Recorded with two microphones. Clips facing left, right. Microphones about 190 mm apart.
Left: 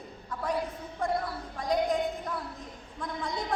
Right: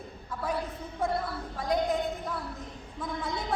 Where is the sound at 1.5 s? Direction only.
5° right (ahead or behind).